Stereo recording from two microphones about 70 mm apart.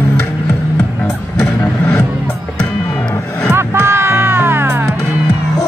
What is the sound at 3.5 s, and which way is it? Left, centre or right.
Music, right.